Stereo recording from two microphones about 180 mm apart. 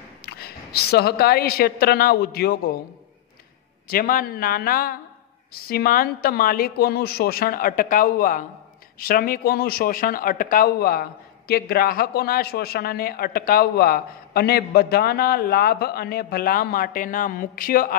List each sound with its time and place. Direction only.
0.2 s a woman's voice: 60° left (ahead or behind)
3.9 s speech: 55° left (ahead or behind)